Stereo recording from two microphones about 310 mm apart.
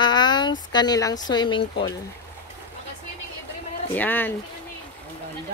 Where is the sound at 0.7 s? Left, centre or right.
Centre.